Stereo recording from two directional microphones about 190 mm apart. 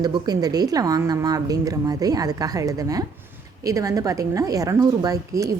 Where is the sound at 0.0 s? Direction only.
20° right (ahead or behind).